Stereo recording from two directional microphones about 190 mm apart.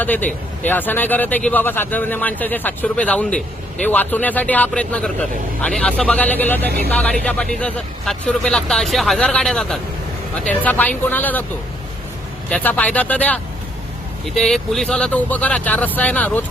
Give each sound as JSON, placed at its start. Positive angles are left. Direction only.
{"t": 0.0, "sound": "speech", "side_deg": 10}
{"t": 6.7, "sound": "speech", "side_deg": -55}
{"t": 6.9, "sound": "speech", "side_deg": 5}
{"t": 12.5, "sound": "speech", "side_deg": 5}